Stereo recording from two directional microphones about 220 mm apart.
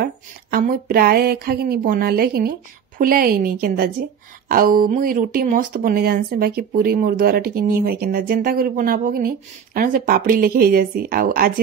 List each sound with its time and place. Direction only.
0.0 s a woman's voice: 40° right (ahead or behind)